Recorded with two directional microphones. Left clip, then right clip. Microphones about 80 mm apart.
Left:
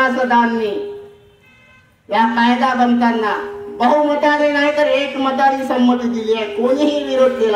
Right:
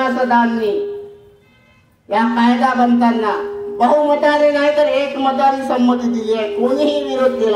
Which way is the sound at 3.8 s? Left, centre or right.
Right.